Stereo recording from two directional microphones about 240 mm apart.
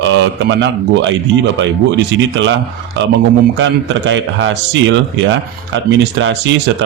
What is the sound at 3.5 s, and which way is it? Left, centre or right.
Speech, right.